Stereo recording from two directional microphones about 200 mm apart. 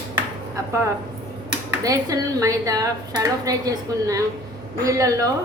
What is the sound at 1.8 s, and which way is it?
A woman's voice, 15° right (ahead or behind).